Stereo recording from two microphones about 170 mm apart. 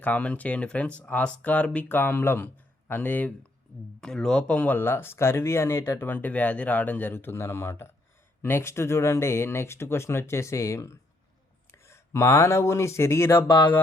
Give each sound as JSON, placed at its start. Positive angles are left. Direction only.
{"t": 0.0, "sound": "speech", "side_deg": 10}